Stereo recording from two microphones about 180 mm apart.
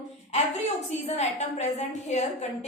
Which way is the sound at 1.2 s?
40° left (ahead or behind).